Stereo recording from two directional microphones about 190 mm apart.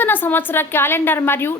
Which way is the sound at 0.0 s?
10° left (ahead or behind).